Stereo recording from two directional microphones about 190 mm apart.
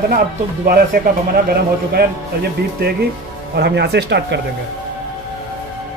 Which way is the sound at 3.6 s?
60° right (ahead or behind).